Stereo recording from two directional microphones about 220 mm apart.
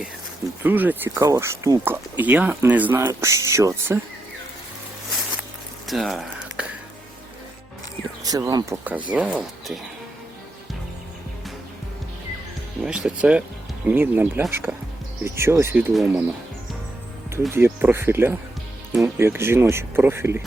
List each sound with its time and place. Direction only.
0.6 s speech: 10° right (ahead or behind)
5.9 s a sound: centre (ahead or behind)
8.2 s speech: 15° right (ahead or behind)
12.8 s speech: 5° right (ahead or behind)
17.5 s speech: 10° right (ahead or behind)